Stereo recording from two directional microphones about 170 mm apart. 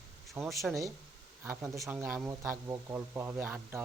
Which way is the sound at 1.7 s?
20° right (ahead or behind).